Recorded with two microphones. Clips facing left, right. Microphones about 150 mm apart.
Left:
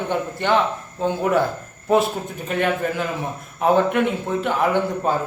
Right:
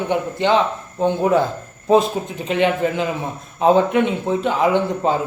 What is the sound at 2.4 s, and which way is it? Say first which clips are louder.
A man's voice: right 4 dB; 20° right (ahead or behind).